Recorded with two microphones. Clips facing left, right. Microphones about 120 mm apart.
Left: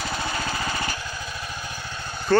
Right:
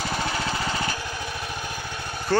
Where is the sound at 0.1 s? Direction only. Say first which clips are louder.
Right 2 dB; 15° right (ahead or behind).